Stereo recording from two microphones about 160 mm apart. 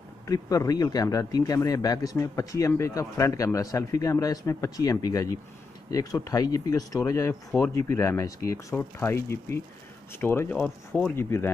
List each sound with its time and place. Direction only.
0.3 s speech: 20° left (ahead or behind)